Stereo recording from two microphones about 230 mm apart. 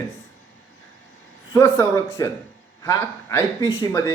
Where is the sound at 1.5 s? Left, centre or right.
Centre.